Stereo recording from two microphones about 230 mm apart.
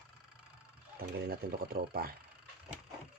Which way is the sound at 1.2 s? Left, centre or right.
Right.